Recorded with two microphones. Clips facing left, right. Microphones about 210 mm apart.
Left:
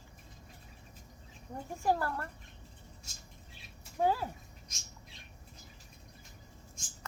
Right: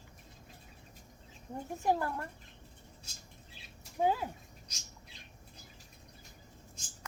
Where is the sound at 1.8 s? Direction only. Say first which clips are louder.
Even; 15° right (ahead or behind).